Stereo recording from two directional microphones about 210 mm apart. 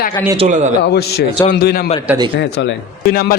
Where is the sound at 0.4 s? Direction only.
35° right (ahead or behind).